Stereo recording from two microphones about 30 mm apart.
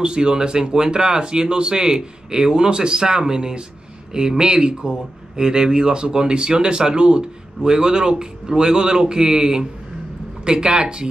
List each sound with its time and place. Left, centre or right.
0.0 s speech: right